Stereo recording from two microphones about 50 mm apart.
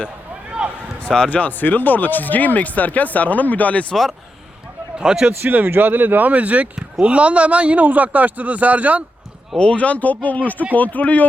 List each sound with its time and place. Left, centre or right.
0.6 s a sound: centre
1.3 s speech: left
4.9 s a man's voice: centre
5.4 s a man's voice: right
9.6 s speech: left